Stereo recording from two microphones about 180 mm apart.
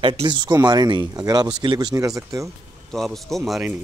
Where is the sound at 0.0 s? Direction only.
25° right (ahead or behind).